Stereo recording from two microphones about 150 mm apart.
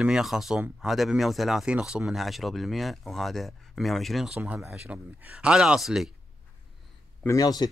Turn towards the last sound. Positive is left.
turn(degrees=25)  # may be behind; listen again after turning